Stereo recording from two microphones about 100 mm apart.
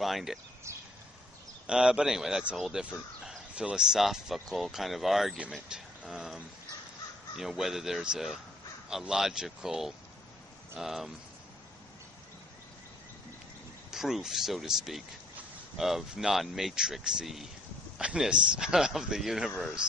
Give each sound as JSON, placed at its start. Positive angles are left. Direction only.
{"t": 0.0, "sound": "speech", "side_deg": -5}
{"t": 0.7, "sound": "a sound", "side_deg": -30}
{"t": 1.7, "sound": "speech", "side_deg": -10}
{"t": 13.8, "sound": "speech", "side_deg": -5}